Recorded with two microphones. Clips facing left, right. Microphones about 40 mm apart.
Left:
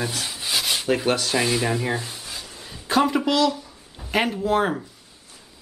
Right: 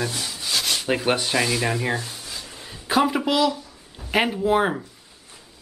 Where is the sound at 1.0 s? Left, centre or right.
Right.